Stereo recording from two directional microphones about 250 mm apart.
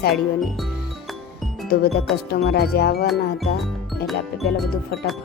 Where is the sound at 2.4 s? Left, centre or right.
Left.